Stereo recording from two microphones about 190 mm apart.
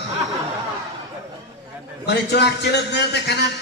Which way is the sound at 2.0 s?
60° left (ahead or behind).